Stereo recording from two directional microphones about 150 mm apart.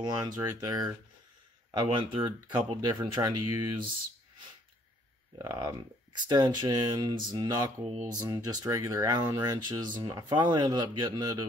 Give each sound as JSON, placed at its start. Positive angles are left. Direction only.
{"t": 0.0, "sound": "speech", "side_deg": -30}
{"t": 5.4, "sound": "speech", "side_deg": -25}